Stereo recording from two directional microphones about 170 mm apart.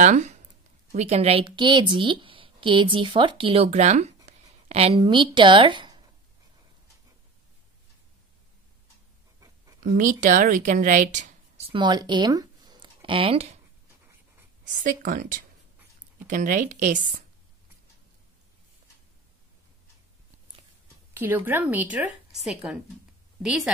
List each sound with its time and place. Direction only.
0.0 s a woman's voice: 45° right (ahead or behind); by 6.0 s 25° right (ahead or behind)
10.2 s a woman's voice: 50° right (ahead or behind); by 13.5 s 35° right (ahead or behind)
14.6 s a woman's voice: 50° right (ahead or behind)
21.1 s speech: 10° right (ahead or behind)